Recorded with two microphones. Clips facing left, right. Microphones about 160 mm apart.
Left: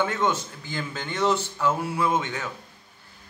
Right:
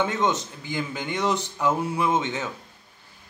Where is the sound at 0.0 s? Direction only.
20° right (ahead or behind).